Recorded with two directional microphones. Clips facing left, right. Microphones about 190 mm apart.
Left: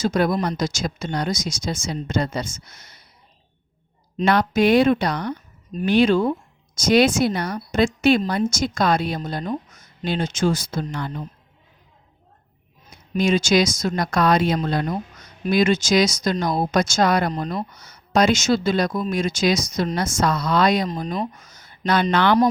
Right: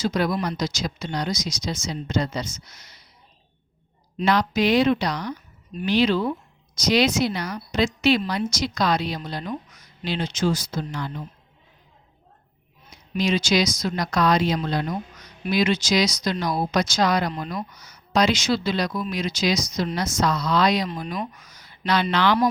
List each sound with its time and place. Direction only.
0.0 s speech: 50° left (ahead or behind)
4.2 s speech: 50° left (ahead or behind)
12.9 s speech: 50° left (ahead or behind)
21.3 s speech: 45° left (ahead or behind)